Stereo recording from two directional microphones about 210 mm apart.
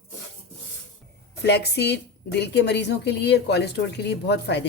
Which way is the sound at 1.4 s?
50° left (ahead or behind).